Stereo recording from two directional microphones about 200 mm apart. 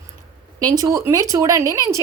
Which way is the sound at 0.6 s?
20° right (ahead or behind).